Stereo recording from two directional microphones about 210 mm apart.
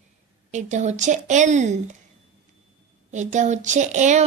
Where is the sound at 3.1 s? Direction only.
35° right (ahead or behind).